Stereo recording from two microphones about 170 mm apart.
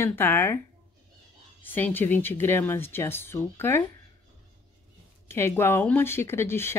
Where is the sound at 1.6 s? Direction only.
10° left (ahead or behind).